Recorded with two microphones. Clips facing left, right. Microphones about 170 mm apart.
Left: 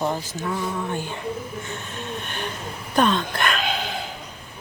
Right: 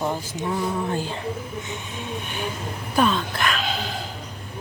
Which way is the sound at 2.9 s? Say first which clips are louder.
Left 1 dB; 5° right (ahead or behind).